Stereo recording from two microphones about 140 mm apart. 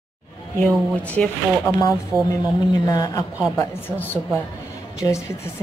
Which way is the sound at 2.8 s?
30° left (ahead or behind).